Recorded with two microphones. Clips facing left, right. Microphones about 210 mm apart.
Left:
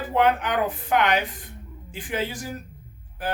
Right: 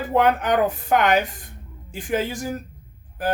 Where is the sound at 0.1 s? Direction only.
45° right (ahead or behind).